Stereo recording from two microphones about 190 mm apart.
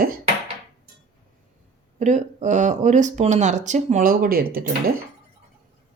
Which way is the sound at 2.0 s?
40° right (ahead or behind).